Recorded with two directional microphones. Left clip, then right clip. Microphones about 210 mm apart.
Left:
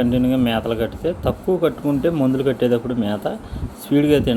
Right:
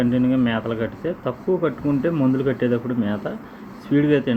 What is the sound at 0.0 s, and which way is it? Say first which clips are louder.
Speech: left 2 dB; 20° left (ahead or behind).